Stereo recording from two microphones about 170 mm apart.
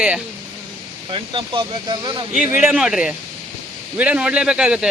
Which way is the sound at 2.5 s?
10° right (ahead or behind).